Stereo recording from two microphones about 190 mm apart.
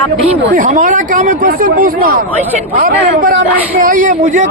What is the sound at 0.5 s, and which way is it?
A man's voice, 45° right (ahead or behind).